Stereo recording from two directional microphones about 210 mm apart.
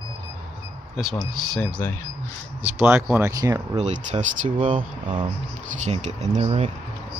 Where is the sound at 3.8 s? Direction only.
35° right (ahead or behind).